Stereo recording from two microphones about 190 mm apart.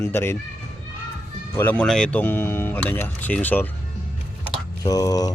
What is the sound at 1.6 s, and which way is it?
Speech, 5° left (ahead or behind).